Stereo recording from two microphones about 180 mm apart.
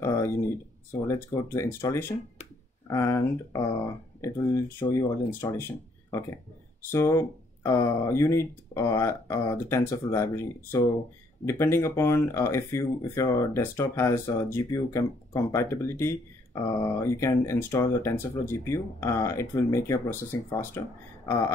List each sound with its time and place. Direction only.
1.0 s speech: 15° left (ahead or behind)